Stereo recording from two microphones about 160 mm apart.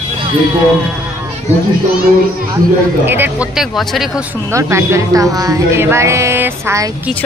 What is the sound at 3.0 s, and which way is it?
Speech, 10° right (ahead or behind).